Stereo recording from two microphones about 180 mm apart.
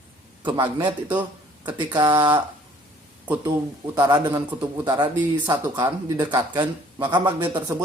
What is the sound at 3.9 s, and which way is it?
Speech, 20° right (ahead or behind).